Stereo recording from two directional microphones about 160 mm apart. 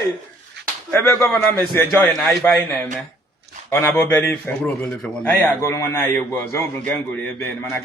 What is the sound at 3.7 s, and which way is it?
Mantra, 15° left (ahead or behind).